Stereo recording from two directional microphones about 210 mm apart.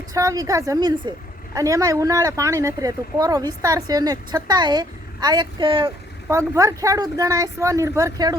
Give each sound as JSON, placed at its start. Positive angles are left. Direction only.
{"t": 0.1, "sound": "speech", "side_deg": -15}